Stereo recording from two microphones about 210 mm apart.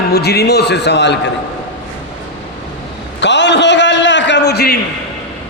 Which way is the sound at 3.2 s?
55° left (ahead or behind).